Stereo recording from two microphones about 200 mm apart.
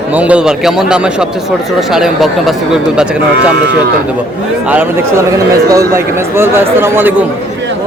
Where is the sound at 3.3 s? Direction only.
55° right (ahead or behind).